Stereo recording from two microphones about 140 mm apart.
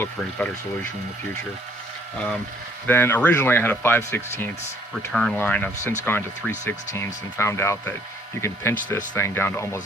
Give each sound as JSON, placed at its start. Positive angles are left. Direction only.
{"t": 0.0, "sound": "speech", "side_deg": 10}
{"t": 2.1, "sound": "speech", "side_deg": 5}
{"t": 5.1, "sound": "speech", "side_deg": 5}